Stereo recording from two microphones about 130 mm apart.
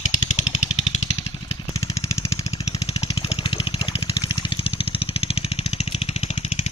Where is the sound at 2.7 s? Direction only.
50° left (ahead or behind).